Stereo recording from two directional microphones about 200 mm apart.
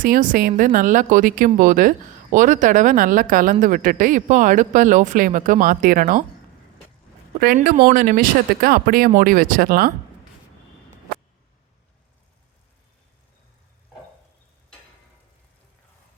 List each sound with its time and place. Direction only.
0.0 s speech: 45° right (ahead or behind)
7.3 s speech: 50° right (ahead or behind)